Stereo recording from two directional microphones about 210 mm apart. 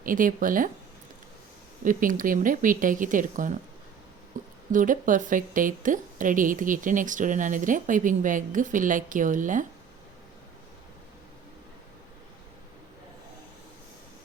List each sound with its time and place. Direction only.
0.0 s a woman's voice: 40° right (ahead or behind)
1.8 s a woman's voice: 40° right (ahead or behind)
4.4 s a sound: 40° right (ahead or behind)
4.7 s a woman's voice: 40° right (ahead or behind)